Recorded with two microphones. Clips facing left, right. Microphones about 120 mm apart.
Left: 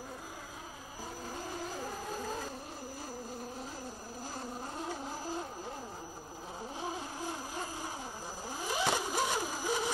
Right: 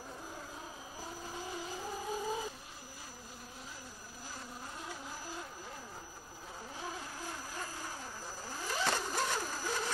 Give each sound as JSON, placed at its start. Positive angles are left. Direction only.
{"t": 2.0, "sound": "vehicle", "side_deg": -5}
{"t": 4.7, "sound": "a sound", "side_deg": 30}
{"t": 6.8, "sound": "vehicle", "side_deg": 20}